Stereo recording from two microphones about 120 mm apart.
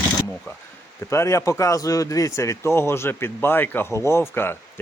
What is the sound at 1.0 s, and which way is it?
A man's voice, 25° left (ahead or behind).